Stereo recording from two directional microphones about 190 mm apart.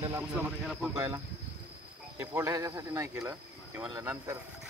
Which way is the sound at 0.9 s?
15° right (ahead or behind).